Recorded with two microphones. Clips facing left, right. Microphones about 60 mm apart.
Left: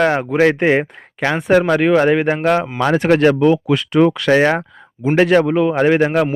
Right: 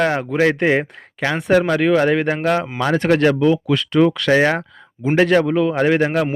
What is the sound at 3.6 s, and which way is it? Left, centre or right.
A man's voice, left.